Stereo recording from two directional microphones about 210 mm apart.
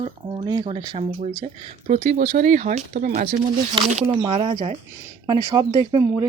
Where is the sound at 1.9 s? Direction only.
40° right (ahead or behind).